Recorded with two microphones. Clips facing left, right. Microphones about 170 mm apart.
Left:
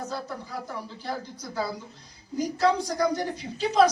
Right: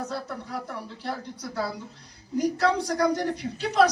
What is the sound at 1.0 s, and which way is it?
A man's voice, 65° right (ahead or behind).